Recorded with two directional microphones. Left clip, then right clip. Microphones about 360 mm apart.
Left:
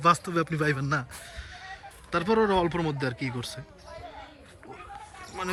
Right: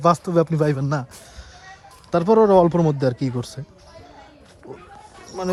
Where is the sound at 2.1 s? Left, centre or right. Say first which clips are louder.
Right 9 dB; centre.